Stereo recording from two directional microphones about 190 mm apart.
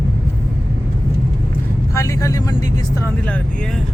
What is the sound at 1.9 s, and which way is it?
Speech, 15° left (ahead or behind).